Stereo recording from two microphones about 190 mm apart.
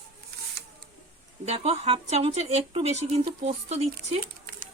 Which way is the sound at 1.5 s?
35° right (ahead or behind).